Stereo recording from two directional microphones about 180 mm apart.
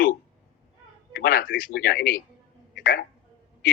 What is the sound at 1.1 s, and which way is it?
A man's voice, 55° left (ahead or behind).